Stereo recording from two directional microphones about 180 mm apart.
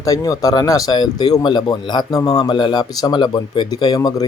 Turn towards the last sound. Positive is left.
turn(degrees=20)  # may be behind; listen again after turning